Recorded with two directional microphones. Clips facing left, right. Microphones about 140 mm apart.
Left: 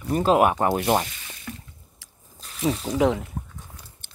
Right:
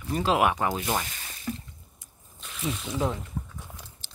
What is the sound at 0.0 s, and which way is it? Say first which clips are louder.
Speech: left 5 dB; 45° left (ahead or behind).